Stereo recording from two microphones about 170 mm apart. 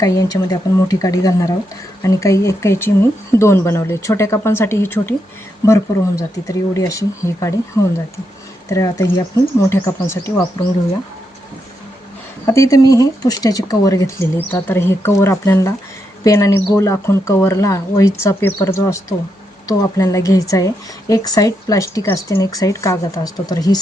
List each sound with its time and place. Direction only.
0.0 s speech: 20° left (ahead or behind)
12.5 s speech: 20° left (ahead or behind)